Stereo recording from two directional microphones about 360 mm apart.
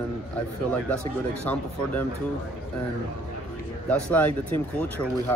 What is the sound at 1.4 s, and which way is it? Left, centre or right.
Speech, centre.